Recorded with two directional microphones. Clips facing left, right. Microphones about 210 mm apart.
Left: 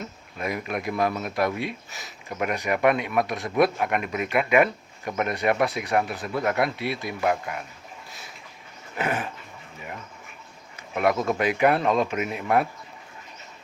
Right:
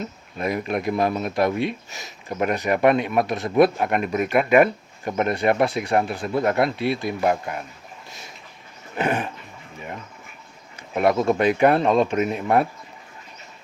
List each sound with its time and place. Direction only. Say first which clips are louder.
0.3 s speech: right 5 dB; 30° right (ahead or behind)
9.0 s speech: right 4 dB; 30° right (ahead or behind)
10.9 s speech: right 4 dB; 30° right (ahead or behind)